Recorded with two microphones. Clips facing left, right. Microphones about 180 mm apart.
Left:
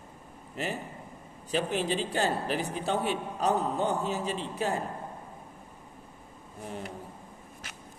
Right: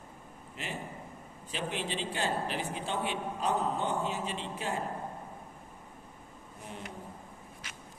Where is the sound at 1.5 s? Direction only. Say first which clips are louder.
Left 7 dB; 40° left (ahead or behind).